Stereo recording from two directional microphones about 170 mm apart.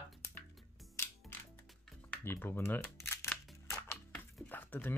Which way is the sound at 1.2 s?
Centre (ahead or behind).